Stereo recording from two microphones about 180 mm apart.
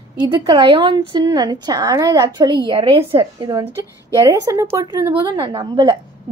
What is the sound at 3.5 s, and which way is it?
A woman's voice, 15° right (ahead or behind).